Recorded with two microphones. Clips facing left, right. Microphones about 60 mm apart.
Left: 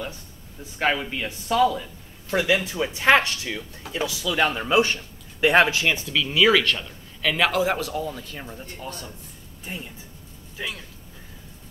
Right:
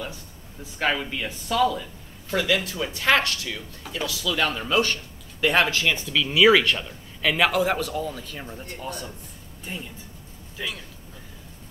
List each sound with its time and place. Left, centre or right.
0.7 s speech: centre
6.2 s a man's voice: centre
9.7 s speech: centre